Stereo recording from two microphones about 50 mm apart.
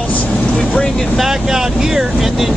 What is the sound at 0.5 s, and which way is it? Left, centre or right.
Vehicle, centre.